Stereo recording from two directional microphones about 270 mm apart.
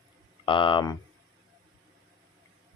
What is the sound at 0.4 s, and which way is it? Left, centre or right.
Speech, centre.